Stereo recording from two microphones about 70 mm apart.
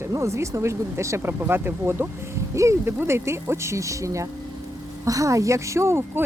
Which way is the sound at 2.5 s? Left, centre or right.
Right.